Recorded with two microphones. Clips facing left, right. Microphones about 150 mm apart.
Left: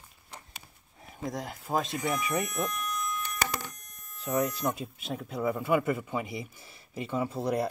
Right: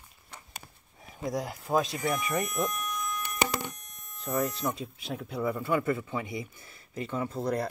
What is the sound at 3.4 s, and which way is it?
Telephone, 20° right (ahead or behind).